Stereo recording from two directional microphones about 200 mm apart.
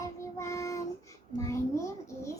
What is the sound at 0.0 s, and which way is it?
Child singing, 15° left (ahead or behind).